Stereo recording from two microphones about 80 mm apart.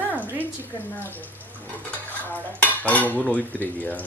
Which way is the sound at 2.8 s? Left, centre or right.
Centre.